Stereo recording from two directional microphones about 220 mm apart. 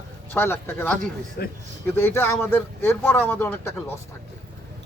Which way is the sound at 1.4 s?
45° left (ahead or behind).